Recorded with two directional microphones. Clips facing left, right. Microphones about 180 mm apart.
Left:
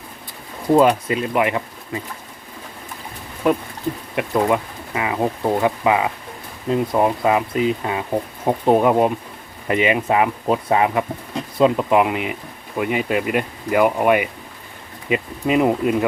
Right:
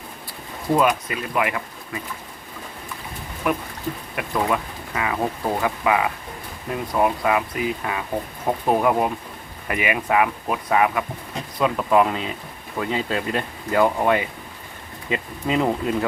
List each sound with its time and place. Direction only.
0.7 s speech: 30° left (ahead or behind)
3.4 s speech: 25° left (ahead or behind)